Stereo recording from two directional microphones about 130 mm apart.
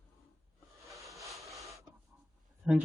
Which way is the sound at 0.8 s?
Centre (ahead or behind).